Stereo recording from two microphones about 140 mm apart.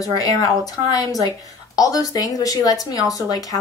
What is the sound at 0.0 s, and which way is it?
A woman's voice, 25° left (ahead or behind).